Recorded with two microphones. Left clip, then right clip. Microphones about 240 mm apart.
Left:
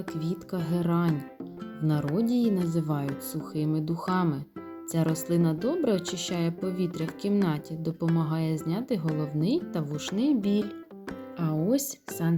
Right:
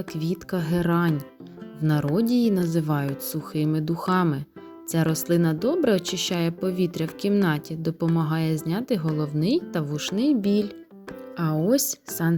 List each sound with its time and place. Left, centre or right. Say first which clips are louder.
0.1 s speech: right 4 dB; right